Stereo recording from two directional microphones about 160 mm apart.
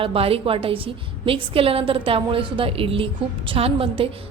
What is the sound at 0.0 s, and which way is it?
A woman's voice, 35° right (ahead or behind).